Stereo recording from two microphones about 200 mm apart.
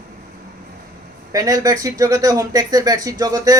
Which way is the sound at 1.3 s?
15° right (ahead or behind).